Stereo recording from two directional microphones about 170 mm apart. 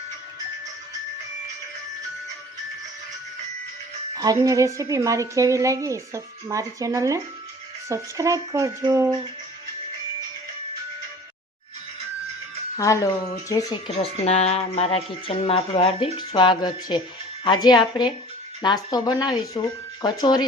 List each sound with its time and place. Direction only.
4.1 s a woman's voice: 20° right (ahead or behind)
12.7 s a woman's voice: 20° left (ahead or behind)
13.9 s a woman's voice: 35° left (ahead or behind)